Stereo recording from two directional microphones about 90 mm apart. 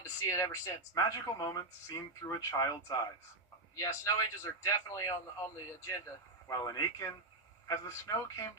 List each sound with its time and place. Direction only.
0.0 s a man's voice: 35° left (ahead or behind)